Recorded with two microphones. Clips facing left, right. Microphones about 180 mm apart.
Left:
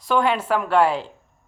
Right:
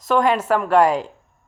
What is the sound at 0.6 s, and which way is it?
Speech, 40° right (ahead or behind).